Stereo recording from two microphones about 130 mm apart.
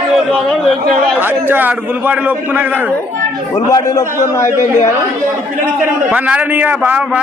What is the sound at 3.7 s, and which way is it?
Speech, 25° left (ahead or behind).